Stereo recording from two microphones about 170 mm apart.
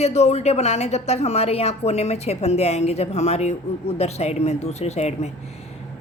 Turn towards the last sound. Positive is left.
turn(degrees=40)  # may be behind; listen again after turning